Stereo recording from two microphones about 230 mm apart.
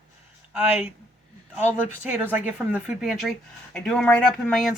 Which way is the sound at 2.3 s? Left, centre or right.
Centre.